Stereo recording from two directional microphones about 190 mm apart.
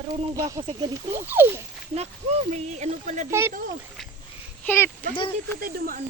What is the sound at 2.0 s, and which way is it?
Speech, 35° right (ahead or behind).